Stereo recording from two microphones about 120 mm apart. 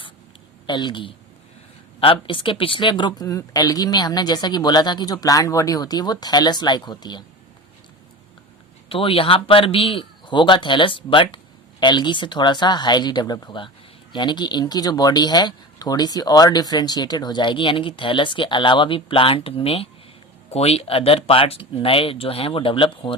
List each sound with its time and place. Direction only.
0.7 s speech: 40° left (ahead or behind)
8.9 s speech: 50° left (ahead or behind)